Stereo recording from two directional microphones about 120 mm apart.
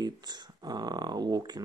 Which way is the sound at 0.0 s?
35° right (ahead or behind).